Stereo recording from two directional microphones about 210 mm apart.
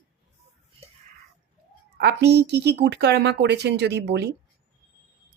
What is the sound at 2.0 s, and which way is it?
Speech, 55° right (ahead or behind).